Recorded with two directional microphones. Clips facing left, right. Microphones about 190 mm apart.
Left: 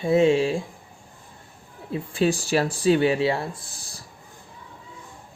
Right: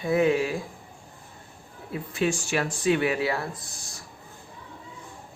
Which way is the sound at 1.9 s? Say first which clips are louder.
Left 4 dB; 30° left (ahead or behind).